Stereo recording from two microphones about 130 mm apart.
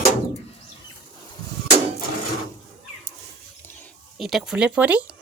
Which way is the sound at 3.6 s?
15° left (ahead or behind).